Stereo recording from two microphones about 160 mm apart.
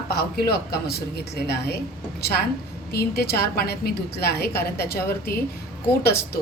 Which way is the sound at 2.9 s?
80° left.